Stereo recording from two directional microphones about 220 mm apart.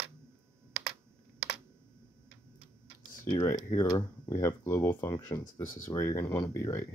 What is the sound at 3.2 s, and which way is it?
Speech, 15° left (ahead or behind).